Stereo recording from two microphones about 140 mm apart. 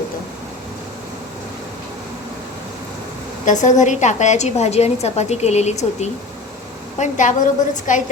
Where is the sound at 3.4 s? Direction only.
65° left (ahead or behind).